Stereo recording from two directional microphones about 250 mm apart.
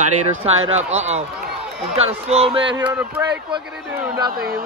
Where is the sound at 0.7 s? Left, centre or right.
Right.